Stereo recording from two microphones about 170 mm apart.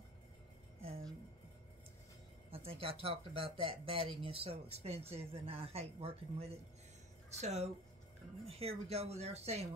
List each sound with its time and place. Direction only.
2.5 s speech: 35° right (ahead or behind)